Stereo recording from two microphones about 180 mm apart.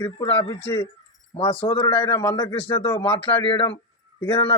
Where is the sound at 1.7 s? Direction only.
15° left (ahead or behind).